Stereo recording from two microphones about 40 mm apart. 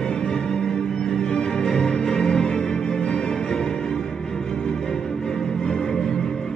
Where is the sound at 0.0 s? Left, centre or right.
Left.